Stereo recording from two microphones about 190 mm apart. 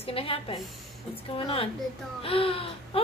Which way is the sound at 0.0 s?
30° left (ahead or behind).